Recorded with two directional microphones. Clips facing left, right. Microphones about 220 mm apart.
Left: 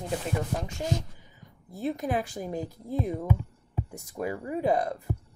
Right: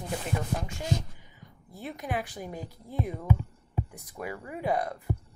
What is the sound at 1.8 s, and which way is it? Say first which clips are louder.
Speech: left 5 dB; 35° left (ahead or behind).